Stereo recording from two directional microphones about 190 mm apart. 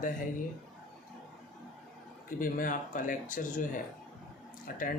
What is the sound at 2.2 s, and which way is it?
Speech, 45° left (ahead or behind).